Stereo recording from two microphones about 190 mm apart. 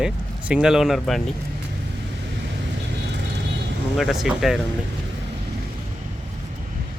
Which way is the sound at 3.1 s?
65° right (ahead or behind).